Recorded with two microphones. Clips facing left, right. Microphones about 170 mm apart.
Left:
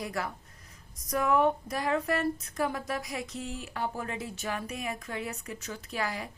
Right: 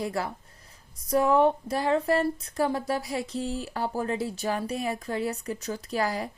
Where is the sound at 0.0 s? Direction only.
30° right (ahead or behind).